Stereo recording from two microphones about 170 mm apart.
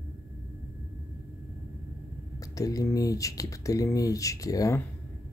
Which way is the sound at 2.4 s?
20° left (ahead or behind).